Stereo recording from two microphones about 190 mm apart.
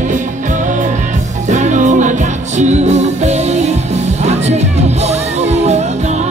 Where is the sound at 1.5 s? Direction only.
40° right (ahead or behind).